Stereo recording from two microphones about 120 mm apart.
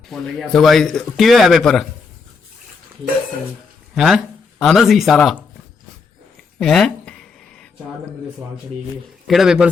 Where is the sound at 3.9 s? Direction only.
5° right (ahead or behind).